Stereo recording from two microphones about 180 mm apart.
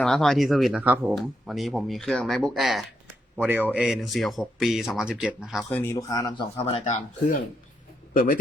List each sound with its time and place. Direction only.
0.0 s speech: centre (ahead or behind)
5.6 s speech: 15° left (ahead or behind)
6.7 s speech: 35° left (ahead or behind)